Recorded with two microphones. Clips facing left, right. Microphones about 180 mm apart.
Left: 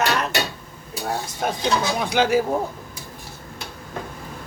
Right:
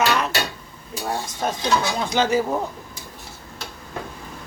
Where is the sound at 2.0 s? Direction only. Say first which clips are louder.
Left 4 dB; 10° left (ahead or behind).